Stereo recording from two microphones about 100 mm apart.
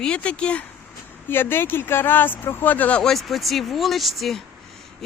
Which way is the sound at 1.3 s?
20° left (ahead or behind).